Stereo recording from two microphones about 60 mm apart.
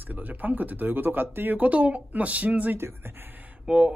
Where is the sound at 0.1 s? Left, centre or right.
Right.